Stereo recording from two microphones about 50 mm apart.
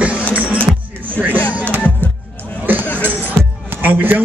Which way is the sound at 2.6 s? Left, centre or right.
Right.